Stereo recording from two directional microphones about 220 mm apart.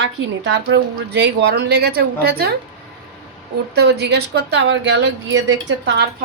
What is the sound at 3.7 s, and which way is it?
A woman's voice, 50° right (ahead or behind).